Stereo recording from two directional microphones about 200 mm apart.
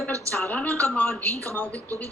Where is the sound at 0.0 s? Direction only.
5° left (ahead or behind).